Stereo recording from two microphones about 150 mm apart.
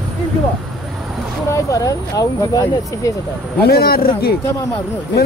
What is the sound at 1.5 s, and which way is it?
Speech, 20° left (ahead or behind).